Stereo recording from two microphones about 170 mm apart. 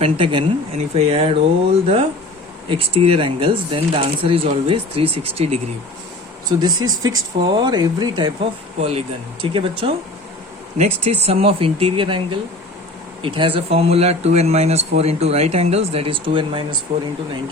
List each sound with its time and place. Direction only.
0.0 s speech: 30° right (ahead or behind)
2.6 s speech: 35° right (ahead or behind)
6.5 s speech: 25° right (ahead or behind)